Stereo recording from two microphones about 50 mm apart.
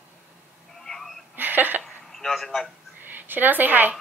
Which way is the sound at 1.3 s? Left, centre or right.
Right.